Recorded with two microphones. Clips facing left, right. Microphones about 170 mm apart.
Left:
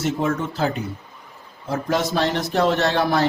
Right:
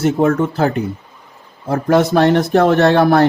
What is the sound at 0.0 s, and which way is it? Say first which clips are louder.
Speech: right 8 dB; 55° right (ahead or behind).